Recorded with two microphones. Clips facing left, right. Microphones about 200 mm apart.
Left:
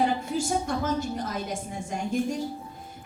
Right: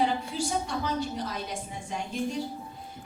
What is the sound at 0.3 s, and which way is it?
A woman's voice, 45° left (ahead or behind).